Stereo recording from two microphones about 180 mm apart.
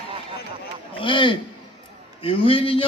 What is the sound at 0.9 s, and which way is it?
A man's voice, 25° left (ahead or behind).